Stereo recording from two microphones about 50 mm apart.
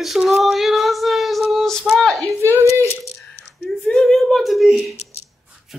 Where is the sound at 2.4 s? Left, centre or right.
Right.